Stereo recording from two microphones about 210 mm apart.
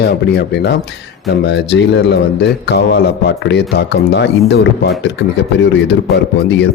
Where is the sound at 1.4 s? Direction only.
55° left (ahead or behind).